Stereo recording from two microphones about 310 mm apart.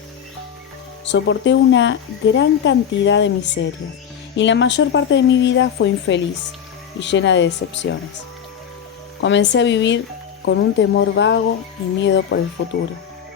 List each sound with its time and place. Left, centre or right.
1.0 s speech: left
9.2 s speech: left